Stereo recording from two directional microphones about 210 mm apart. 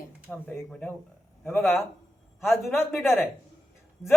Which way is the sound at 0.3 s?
5° left (ahead or behind).